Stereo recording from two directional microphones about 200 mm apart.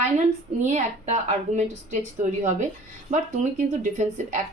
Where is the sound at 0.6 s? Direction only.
35° right (ahead or behind).